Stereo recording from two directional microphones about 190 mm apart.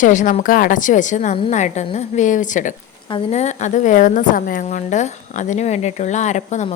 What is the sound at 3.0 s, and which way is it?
A woman's voice, 30° left (ahead or behind).